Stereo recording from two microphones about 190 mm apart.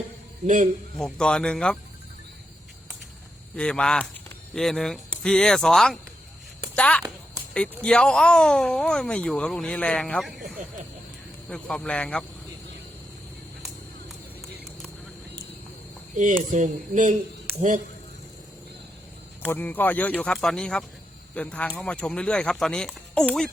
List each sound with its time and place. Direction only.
0.4 s speech: 40° right (ahead or behind)
0.9 s speech: 5° left (ahead or behind)
3.5 s a woman's voice: 5° left (ahead or behind)
16.1 s speech: 40° right (ahead or behind)
19.5 s speech: 10° left (ahead or behind)